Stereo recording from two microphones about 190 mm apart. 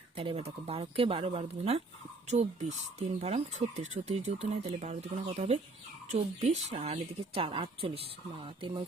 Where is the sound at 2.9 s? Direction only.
35° right (ahead or behind).